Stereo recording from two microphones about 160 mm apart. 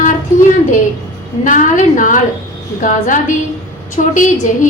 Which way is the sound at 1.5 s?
55° left (ahead or behind).